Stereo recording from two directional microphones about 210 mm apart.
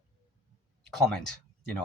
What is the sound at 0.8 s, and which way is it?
Speech, centre (ahead or behind).